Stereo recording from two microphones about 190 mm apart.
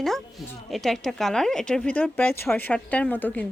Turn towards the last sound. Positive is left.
turn(degrees=10)  # may be behind; listen again after turning